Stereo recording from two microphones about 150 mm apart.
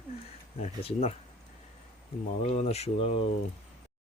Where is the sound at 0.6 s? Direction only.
40° left (ahead or behind).